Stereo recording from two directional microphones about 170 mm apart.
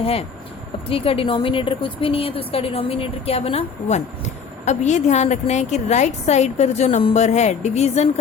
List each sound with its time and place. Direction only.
0.0 s a woman's voice: 35° left (ahead or behind)